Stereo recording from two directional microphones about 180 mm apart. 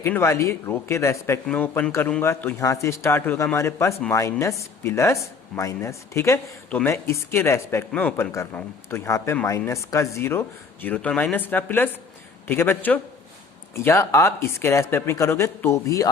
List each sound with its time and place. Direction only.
0.0 s speech: 15° left (ahead or behind)